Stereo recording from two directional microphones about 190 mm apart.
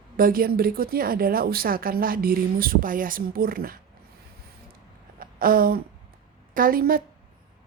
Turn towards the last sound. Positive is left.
turn(degrees=-50)  # may be behind; listen again after turning